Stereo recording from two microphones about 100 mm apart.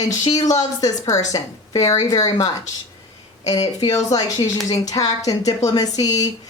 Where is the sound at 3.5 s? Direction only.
40° left (ahead or behind).